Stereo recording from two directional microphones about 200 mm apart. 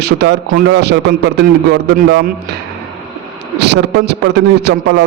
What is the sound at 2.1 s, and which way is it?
Speech, 55° right (ahead or behind).